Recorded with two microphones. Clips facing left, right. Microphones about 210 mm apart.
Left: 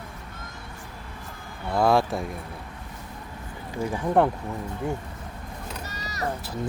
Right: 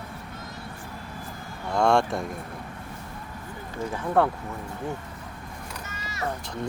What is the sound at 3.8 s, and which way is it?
Speech, 15° left (ahead or behind).